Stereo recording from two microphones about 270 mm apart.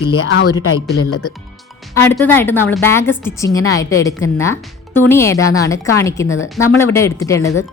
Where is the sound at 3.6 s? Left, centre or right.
Left.